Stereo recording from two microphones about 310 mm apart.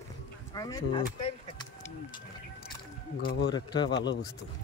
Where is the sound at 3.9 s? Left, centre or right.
Left.